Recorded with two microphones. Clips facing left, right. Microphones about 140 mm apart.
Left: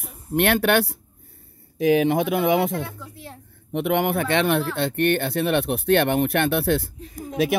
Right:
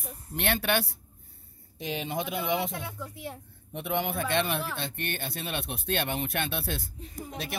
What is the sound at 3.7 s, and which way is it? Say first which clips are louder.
Speech: left 9 dB; 75° left (ahead or behind).